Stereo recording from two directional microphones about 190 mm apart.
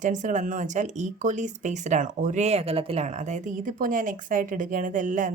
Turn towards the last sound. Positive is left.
turn(degrees=-45)  # may be behind; listen again after turning